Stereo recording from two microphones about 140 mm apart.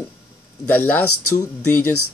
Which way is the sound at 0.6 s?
10° left (ahead or behind).